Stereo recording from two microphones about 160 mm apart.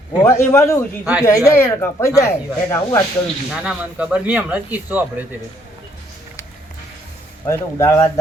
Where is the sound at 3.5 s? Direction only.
5° right (ahead or behind).